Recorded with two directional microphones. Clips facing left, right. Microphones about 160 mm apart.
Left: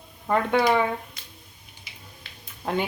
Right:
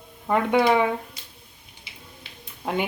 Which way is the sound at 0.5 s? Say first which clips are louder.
Right 2 dB; 20° right (ahead or behind).